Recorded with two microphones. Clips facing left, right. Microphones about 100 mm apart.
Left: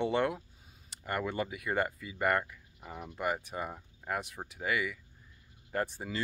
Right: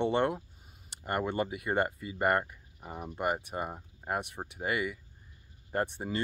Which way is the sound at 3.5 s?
25° right (ahead or behind).